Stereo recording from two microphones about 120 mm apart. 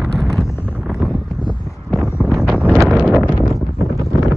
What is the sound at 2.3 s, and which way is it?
Wind, centre (ahead or behind).